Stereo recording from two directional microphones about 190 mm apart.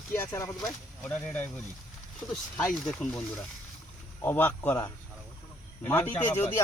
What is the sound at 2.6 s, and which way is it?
Speech, 5° left (ahead or behind).